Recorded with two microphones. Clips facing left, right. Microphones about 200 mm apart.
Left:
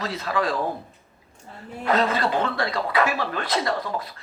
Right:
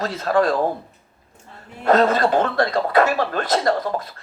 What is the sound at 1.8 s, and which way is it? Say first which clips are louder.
Speech: right 6 dB; 45° right (ahead or behind).